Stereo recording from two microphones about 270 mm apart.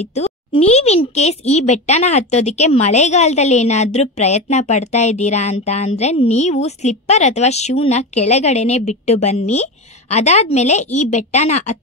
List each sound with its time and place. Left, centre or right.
0.0 s a child's voice: left